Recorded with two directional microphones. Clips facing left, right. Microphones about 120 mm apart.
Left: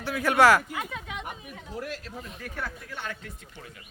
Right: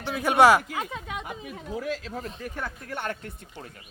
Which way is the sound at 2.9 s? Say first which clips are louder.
Right 9 dB; 50° right (ahead or behind).